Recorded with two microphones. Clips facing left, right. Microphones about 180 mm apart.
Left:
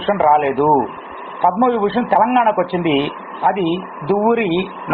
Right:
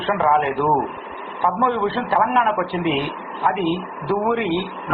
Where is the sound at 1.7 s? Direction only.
75° left (ahead or behind).